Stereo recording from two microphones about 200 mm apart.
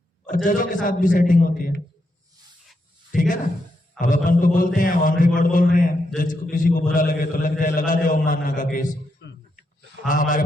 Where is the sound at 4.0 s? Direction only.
40° left (ahead or behind).